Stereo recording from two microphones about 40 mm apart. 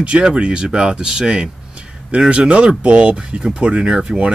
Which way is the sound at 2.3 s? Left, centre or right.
Right.